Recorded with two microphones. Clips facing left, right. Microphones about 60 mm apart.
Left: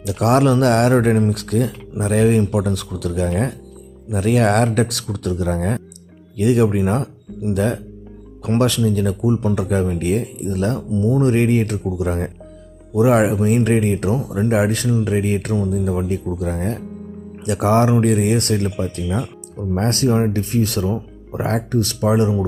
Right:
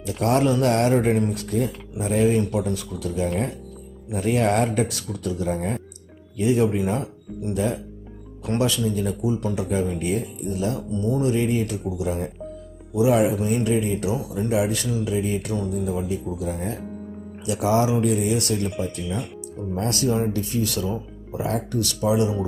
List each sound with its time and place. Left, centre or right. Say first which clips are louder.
0.0 s a sound: left 5 dB; left
1.3 s speech: left 4 dB; left
15.1 s speech: left 5 dB; left